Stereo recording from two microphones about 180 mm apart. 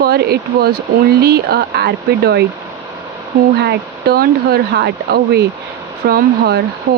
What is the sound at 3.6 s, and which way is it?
Speech, 65° right (ahead or behind).